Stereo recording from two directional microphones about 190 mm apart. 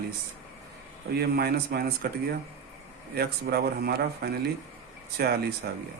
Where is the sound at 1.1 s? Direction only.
55° right (ahead or behind).